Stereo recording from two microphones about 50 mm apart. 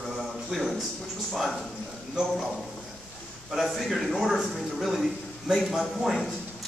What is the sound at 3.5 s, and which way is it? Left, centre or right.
A man's voice, centre.